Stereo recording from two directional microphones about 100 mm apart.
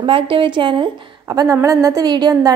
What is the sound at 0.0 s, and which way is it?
A woman's voice, 60° right (ahead or behind).